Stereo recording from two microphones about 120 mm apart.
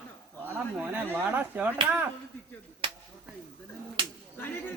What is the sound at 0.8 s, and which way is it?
Speech, 15° right (ahead or behind).